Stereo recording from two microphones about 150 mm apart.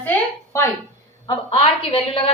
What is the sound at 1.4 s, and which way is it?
Speech, 40° left (ahead or behind).